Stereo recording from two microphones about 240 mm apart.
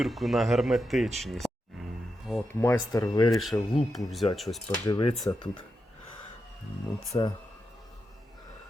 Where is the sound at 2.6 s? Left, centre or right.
Centre.